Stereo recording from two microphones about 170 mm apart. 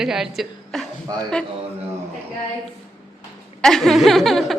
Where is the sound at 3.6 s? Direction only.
Centre (ahead or behind).